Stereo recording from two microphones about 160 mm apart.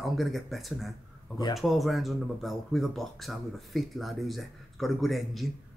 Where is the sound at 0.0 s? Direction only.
Centre (ahead or behind).